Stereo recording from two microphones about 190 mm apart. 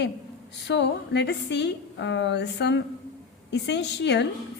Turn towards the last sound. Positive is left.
turn(degrees=65)  # may be behind; listen again after turning